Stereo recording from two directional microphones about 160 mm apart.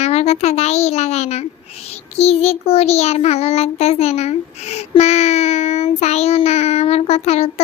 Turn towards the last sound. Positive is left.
turn(degrees=40)  # may be behind; listen again after turning